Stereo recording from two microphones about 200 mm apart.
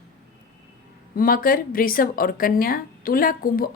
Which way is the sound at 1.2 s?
45° left (ahead or behind).